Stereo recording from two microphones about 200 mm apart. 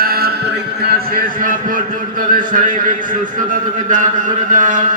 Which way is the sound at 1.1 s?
45° right (ahead or behind).